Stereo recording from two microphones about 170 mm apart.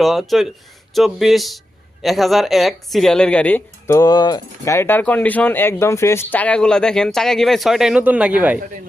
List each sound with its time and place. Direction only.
0.0 s speech: centre (ahead or behind)